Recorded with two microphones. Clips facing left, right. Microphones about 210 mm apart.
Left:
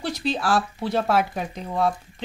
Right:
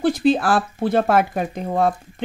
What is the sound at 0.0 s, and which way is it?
A woman's voice, 50° right (ahead or behind).